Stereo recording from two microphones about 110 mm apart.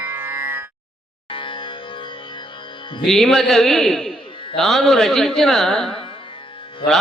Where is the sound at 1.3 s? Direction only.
50° left (ahead or behind).